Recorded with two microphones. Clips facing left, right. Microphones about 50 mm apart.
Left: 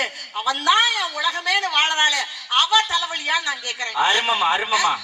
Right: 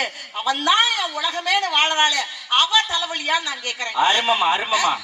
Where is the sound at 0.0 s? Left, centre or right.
Right.